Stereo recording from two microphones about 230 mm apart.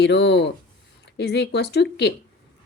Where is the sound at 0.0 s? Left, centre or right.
Left.